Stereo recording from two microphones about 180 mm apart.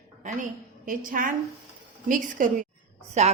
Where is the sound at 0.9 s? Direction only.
50° right (ahead or behind).